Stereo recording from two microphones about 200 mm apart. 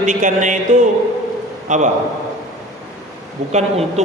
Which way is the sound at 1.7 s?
35° right (ahead or behind).